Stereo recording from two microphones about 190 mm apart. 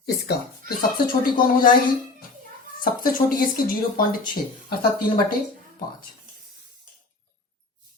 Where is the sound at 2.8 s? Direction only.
50° left (ahead or behind).